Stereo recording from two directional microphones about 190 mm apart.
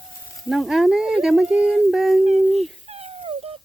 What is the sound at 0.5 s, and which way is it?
Speech, centre (ahead or behind).